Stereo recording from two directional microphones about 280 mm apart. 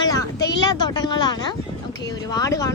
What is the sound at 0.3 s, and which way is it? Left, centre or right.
Speech, left.